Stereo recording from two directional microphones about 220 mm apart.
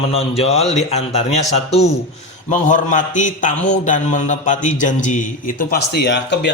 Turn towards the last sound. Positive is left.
turn(degrees=50)  # may be behind; listen again after turning